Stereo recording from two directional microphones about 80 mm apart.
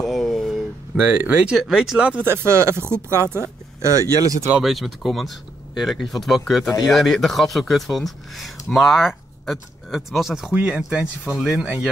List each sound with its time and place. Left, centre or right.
0.0 s a sound: centre
0.9 s speech: right
1.6 s speech: centre
2.2 s speech: right
3.8 s speech: right
4.6 s speech: centre